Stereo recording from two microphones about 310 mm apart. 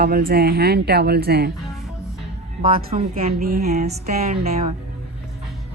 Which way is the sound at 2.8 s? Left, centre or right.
Right.